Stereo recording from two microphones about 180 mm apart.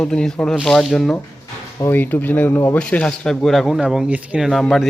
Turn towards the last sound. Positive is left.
turn(degrees=0)  # may be behind; listen again after turning